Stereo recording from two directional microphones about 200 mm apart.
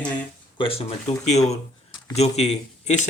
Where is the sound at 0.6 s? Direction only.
30° left (ahead or behind).